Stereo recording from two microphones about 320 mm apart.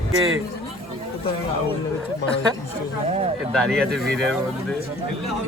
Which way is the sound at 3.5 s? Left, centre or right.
Centre.